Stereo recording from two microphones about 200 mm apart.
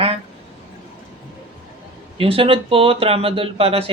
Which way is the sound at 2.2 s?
30° right (ahead or behind).